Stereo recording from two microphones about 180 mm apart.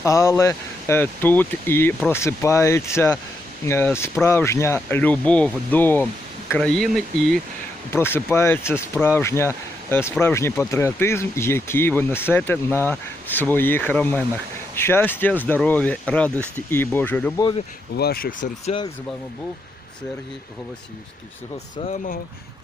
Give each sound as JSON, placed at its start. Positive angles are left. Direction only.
{"t": 0.0, "sound": "speech", "side_deg": 15}
{"t": 7.9, "sound": "speech", "side_deg": 15}
{"t": 17.9, "sound": "speech", "side_deg": 60}
{"t": 21.8, "sound": "speech", "side_deg": 50}